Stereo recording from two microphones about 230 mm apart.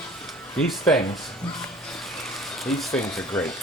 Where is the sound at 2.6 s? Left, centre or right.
Centre.